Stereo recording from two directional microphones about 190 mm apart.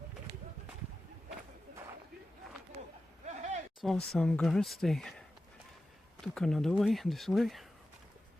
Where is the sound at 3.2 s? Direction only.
40° right (ahead or behind).